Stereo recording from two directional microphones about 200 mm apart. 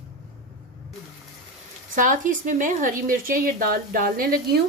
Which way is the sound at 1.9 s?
40° right (ahead or behind).